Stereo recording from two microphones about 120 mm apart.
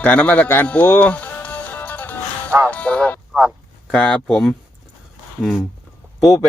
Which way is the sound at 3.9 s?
5° left (ahead or behind).